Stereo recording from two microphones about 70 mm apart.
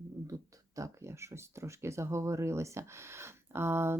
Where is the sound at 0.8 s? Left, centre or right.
Right.